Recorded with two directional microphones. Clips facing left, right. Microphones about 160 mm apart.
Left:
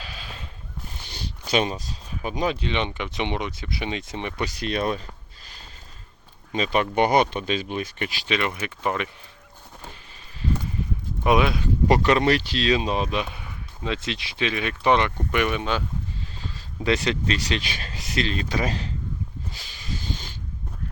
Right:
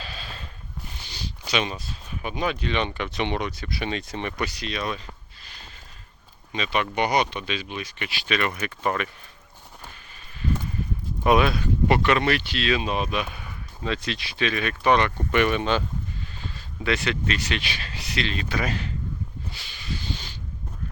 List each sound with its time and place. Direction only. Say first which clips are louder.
0.0 s a sound: right 1 dB; 10° left (ahead or behind)
1.0 s speech: left 1 dB; 50° left (ahead or behind); by 4.4 s 20° left (ahead or behind)
4.5 s speech: left 5 dB; 50° left (ahead or behind)
6.5 s speech: left 3 dB; 40° left (ahead or behind)
8.3 s speech: right 1 dB; 20° left (ahead or behind)
11.2 s speech: right 1 dB; 15° left (ahead or behind)
11.9 s speech: left 2 dB; 35° left (ahead or behind)
15.3 s speech: right 4 dB; 10° left (ahead or behind)
16.4 s speech: left 3 dB; 35° left (ahead or behind)
19.7 s a sound: even; 45° left (ahead or behind)